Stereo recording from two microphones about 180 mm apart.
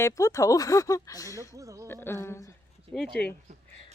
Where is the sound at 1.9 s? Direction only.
15° left (ahead or behind).